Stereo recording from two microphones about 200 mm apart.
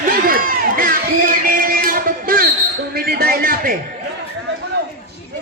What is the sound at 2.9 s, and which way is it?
Speech, 50° right (ahead or behind).